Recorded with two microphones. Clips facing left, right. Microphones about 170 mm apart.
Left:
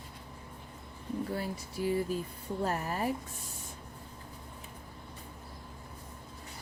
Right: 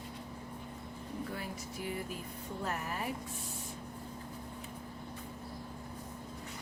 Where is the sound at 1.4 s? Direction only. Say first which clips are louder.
Left 6 dB; 30° left (ahead or behind).